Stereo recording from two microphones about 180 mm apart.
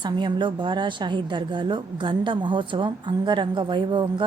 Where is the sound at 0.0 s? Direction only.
25° right (ahead or behind).